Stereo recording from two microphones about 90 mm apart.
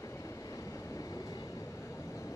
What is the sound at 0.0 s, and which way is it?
Vehicle, 35° left (ahead or behind).